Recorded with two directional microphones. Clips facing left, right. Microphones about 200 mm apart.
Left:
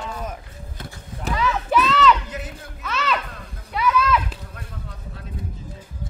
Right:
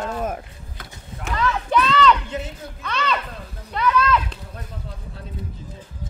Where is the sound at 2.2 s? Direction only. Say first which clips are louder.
Right 4 dB; 30° right (ahead or behind).